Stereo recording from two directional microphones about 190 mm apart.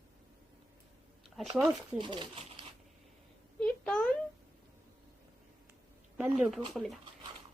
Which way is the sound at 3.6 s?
5° left (ahead or behind).